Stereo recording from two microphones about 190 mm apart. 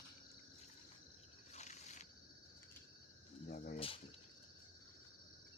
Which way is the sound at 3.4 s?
50° left (ahead or behind).